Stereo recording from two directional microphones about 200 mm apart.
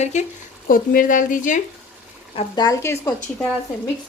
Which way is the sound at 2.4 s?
20° left (ahead or behind).